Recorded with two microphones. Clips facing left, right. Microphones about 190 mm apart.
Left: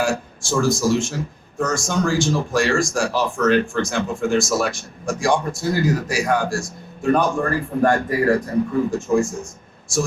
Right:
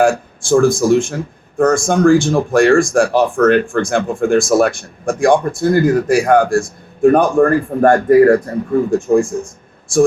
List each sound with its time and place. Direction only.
0.0 s speech: 55° right (ahead or behind)